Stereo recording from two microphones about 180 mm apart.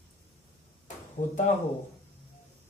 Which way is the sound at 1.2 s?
45° left (ahead or behind).